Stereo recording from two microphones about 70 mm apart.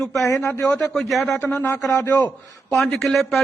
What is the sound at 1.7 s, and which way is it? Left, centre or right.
Speech, left.